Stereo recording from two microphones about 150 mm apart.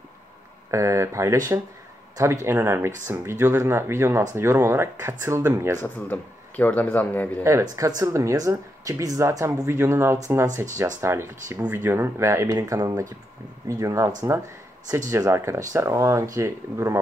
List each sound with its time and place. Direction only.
0.7 s speech: 20° right (ahead or behind)
5.8 s speech: 10° left (ahead or behind)
7.7 s speech: 20° right (ahead or behind)